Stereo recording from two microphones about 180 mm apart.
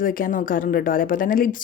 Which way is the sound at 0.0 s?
50° left (ahead or behind).